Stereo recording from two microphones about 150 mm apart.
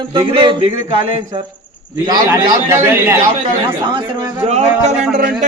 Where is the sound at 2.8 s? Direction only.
15° right (ahead or behind).